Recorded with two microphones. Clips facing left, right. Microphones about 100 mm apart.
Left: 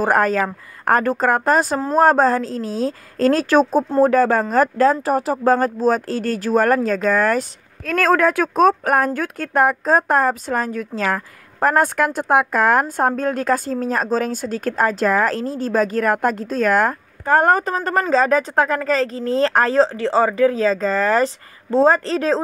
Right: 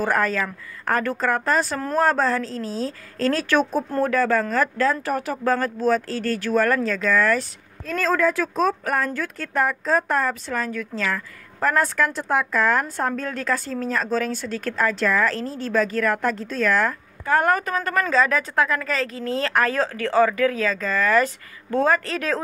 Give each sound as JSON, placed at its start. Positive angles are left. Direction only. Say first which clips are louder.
{"t": 0.0, "sound": "a woman's voice", "louder": "left 5 dB", "side_deg": 45}
{"t": 2.5, "sound": "a woman's voice", "louder": "left 4 dB", "side_deg": -35}
{"t": 2.8, "sound": "a woman's voice", "louder": "left 7 dB", "side_deg": 45}
{"t": 7.8, "sound": "a woman's voice", "louder": "left 5 dB", "side_deg": 70}
{"t": 17.2, "sound": "speech", "louder": "left 5 dB", "side_deg": 40}